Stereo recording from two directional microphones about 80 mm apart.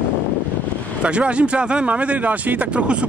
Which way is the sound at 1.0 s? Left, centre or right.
Centre.